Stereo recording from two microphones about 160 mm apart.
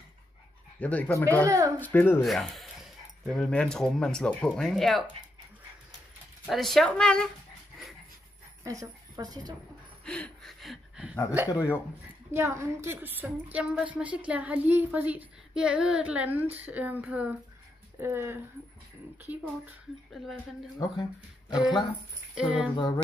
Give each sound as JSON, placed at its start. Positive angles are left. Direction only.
{"t": 0.7, "sound": "speech", "side_deg": 10}
{"t": 2.2, "sound": "speech", "side_deg": 0}
{"t": 6.4, "sound": "speech", "side_deg": 0}
{"t": 8.6, "sound": "a woman's voice", "side_deg": -20}
{"t": 10.0, "sound": "a sound", "side_deg": 5}
{"t": 11.4, "sound": "speech", "side_deg": 15}
{"t": 12.3, "sound": "a woman's voice", "side_deg": -20}
{"t": 19.6, "sound": "speech", "side_deg": 0}
{"t": 20.8, "sound": "speech", "side_deg": 20}
{"t": 21.5, "sound": "speech", "side_deg": 0}